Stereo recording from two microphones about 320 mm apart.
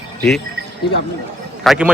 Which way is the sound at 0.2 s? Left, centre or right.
Centre.